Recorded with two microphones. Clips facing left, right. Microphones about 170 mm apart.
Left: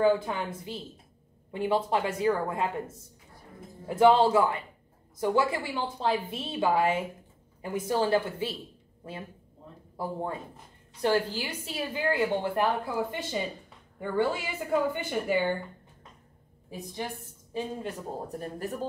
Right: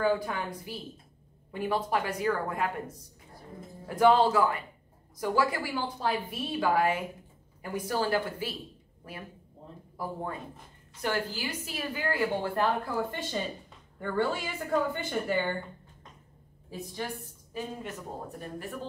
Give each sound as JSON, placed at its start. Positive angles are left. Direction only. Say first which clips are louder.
{"t": 0.0, "sound": "a woman's voice", "louder": "left 3 dB", "side_deg": 25}
{"t": 16.7, "sound": "a woman's voice", "louder": "left 1 dB", "side_deg": 20}
{"t": 18.4, "sound": "speech", "louder": "left 5 dB", "side_deg": 40}